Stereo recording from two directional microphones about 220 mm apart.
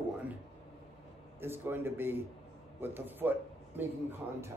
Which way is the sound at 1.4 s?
10° right (ahead or behind).